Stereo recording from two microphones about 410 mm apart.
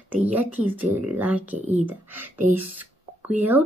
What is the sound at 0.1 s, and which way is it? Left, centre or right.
Speech, centre.